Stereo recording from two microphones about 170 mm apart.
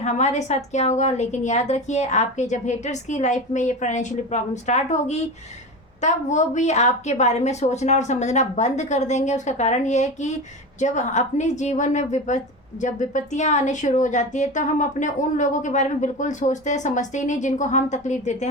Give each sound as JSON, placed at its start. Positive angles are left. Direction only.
{"t": 0.0, "sound": "a woman's voice", "side_deg": 40}